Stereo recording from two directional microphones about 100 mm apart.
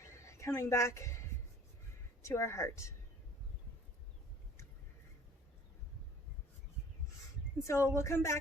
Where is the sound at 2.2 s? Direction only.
30° left (ahead or behind).